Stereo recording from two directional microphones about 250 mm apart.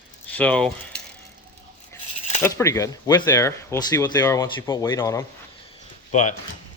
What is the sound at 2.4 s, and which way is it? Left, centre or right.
Speech, centre.